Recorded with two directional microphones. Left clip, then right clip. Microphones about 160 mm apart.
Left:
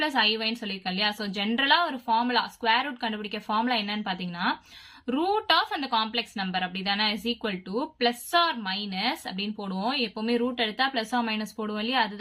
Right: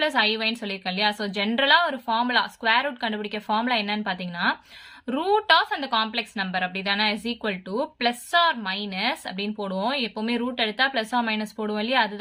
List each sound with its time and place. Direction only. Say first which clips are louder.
0.1 s a woman's voice: right 2 dB; 25° right (ahead or behind)